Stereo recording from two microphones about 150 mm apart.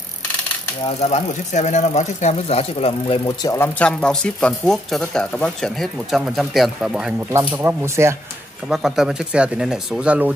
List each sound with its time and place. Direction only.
0.8 s speech: 45° left (ahead or behind)
3.3 s speech: 20° left (ahead or behind); by 7.2 s 5° right (ahead or behind)
7.3 s speech: 15° right (ahead or behind)
8.6 s speech: 5° right (ahead or behind)